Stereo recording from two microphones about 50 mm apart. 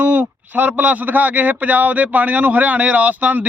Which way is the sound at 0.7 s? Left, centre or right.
Right.